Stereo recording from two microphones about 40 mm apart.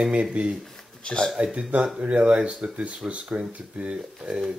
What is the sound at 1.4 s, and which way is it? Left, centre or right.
Speech, right.